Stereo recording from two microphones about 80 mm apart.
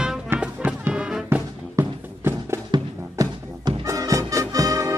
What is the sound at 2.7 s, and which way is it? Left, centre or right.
Music, right.